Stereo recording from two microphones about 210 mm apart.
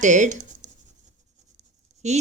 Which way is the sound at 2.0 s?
35° right (ahead or behind).